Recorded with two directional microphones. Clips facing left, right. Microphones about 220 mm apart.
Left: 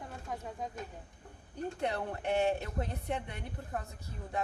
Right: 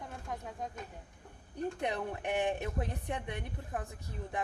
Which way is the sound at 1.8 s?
15° right (ahead or behind).